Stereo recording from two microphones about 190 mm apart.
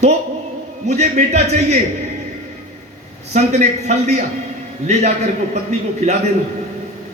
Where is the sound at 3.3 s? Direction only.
40° right (ahead or behind).